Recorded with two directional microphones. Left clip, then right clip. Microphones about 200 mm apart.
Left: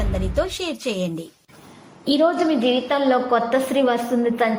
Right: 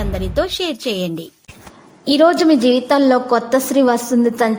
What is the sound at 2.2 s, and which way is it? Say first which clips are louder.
A woman's voice: right 7 dB; 40° right (ahead or behind).